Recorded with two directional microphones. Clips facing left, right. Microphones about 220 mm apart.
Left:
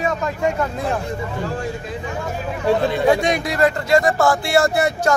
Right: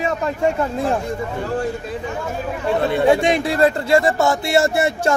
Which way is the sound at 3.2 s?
30° right (ahead or behind).